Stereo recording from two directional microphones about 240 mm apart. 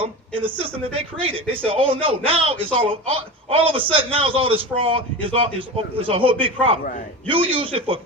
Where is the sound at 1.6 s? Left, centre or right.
Right.